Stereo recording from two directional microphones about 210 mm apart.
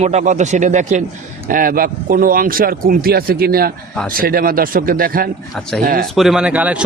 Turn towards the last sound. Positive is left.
turn(degrees=-5)  # may be behind; listen again after turning